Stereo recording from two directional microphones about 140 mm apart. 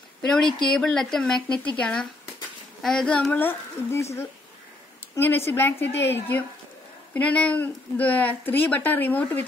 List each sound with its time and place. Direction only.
0.2 s a woman's voice: 5° left (ahead or behind)